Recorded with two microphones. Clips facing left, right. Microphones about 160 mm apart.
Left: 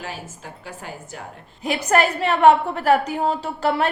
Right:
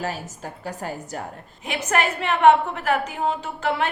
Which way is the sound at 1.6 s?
35° left (ahead or behind).